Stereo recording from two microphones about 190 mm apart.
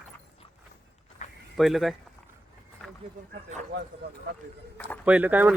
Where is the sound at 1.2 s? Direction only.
40° left (ahead or behind).